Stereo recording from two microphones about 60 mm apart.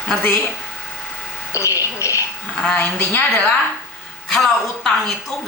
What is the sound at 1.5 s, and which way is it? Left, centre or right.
Speech, left.